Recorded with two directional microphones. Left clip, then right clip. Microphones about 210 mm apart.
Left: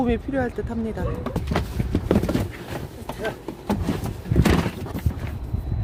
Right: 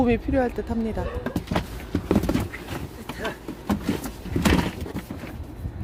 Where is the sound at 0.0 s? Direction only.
10° right (ahead or behind).